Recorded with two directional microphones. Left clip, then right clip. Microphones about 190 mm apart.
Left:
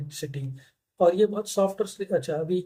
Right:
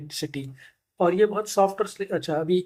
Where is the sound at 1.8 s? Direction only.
25° right (ahead or behind).